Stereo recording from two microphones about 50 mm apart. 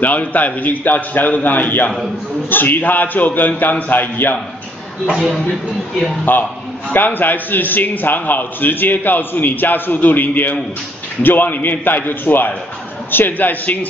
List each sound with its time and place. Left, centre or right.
0.0 s a man's voice: left
5.1 s a man's voice: centre
6.3 s a man's voice: left